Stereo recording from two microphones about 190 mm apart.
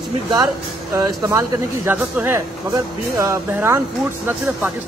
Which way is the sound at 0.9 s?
15° right (ahead or behind).